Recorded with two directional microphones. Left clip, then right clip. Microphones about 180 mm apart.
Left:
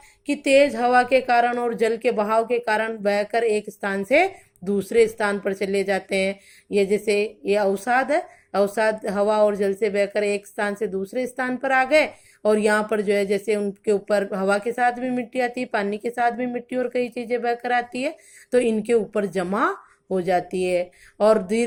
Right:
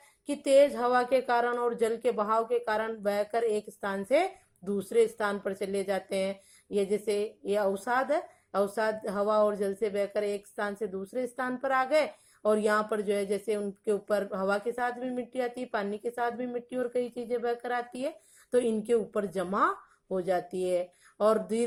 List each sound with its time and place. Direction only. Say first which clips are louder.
0.3 s a woman's voice: left 5 dB; 25° left (ahead or behind)